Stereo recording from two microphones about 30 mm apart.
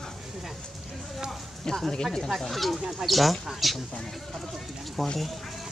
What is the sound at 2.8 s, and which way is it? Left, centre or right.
Speech, centre.